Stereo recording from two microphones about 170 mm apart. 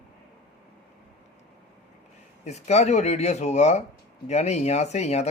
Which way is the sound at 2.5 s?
40° left (ahead or behind).